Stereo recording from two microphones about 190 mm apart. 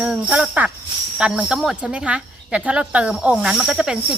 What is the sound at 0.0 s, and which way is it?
Speech, 5° right (ahead or behind).